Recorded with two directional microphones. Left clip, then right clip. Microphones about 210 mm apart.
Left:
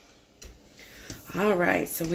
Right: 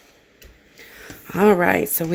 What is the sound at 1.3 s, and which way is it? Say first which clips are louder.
Speech: right 8 dB; 50° right (ahead or behind).